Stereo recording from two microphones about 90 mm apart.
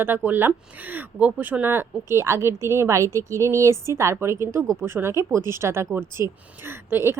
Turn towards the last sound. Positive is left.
turn(degrees=-25)  # may be behind; listen again after turning